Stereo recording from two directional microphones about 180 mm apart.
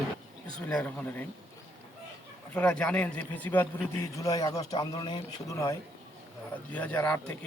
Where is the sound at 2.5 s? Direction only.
10° left (ahead or behind).